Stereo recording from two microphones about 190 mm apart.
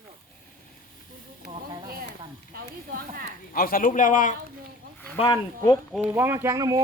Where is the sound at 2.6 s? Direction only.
50° right (ahead or behind).